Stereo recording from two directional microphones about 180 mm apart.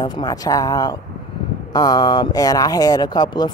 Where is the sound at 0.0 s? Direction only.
25° left (ahead or behind).